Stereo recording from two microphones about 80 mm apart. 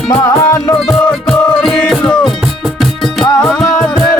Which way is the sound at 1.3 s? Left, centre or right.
Centre.